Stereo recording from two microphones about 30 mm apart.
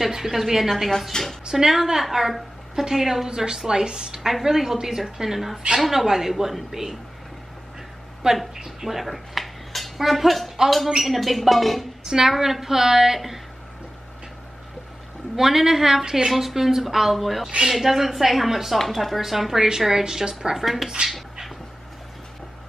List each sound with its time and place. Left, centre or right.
0.1 s a woman's voice: centre
1.1 s speech: left
1.5 s a woman's voice: centre
4.2 s a woman's voice: centre
4.5 s a woman's voice: centre
8.2 s a woman's voice: right
8.6 s dishes: centre
9.9 s speech: centre
12.0 s a woman's voice: centre
15.3 s a woman's voice: centre
16.3 s a woman's voice: centre
20.5 s speech: centre